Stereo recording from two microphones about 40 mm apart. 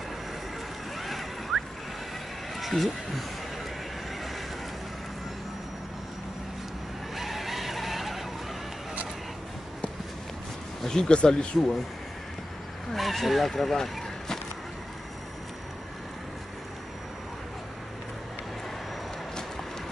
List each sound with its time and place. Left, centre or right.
0.9 s a sound: centre
2.5 s speech: centre
7.2 s vehicle: centre
10.8 s speech: centre
12.9 s speech: centre